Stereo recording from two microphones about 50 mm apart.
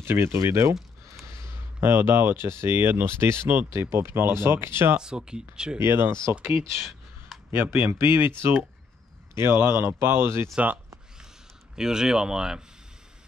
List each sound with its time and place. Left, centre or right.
0.0 s speech: right
0.4 s speech: right
1.8 s speech: right
4.9 s speech: centre
5.8 s speech: right
7.5 s speech: right
11.7 s speech: centre